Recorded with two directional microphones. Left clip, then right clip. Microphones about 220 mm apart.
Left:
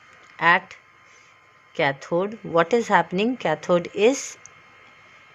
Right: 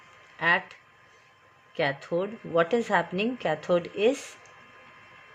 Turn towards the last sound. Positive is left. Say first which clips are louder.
# left 5 dB
turn(degrees=20)  # may be behind; listen again after turning